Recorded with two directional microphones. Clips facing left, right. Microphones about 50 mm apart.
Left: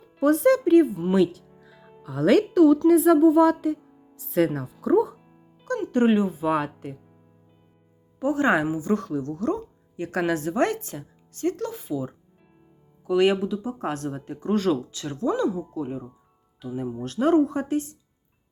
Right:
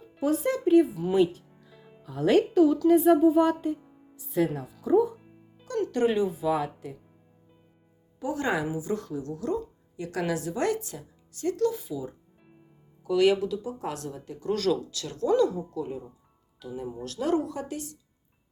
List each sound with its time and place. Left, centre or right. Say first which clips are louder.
0.2 s a woman's voice: left 7 dB; left
1.1 s speech: even; left
2.8 s speech: left 3 dB; left
4.2 s speech: left 4 dB; left
5.9 s speech: left 5 dB; left
6.4 s a woman's voice: left 3 dB; left
8.2 s a woman's voice: left 7 dB; left
13.1 s speech: left 2 dB; left
16.7 s speech: left 5 dB; left